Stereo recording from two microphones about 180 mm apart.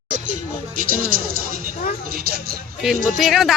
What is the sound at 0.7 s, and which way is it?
A woman's voice, 50° right (ahead or behind).